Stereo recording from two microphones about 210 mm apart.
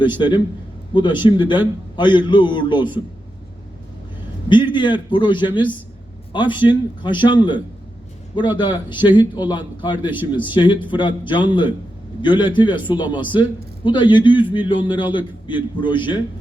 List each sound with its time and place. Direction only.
0.2 s a man's voice: 20° left (ahead or behind)
4.4 s a man's voice: 20° left (ahead or behind)